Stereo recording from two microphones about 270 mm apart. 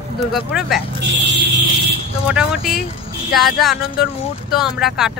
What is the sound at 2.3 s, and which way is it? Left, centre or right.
Speech, centre.